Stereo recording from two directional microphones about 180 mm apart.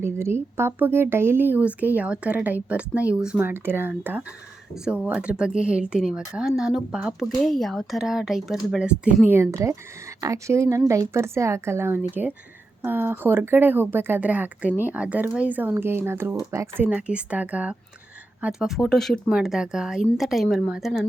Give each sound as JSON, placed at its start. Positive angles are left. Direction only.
{"t": 0.0, "sound": "speech", "side_deg": -15}